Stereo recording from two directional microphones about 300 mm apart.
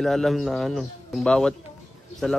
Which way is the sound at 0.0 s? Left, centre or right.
Centre.